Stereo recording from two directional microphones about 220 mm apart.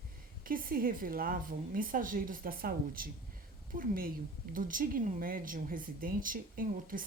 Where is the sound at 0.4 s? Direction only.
40° right (ahead or behind).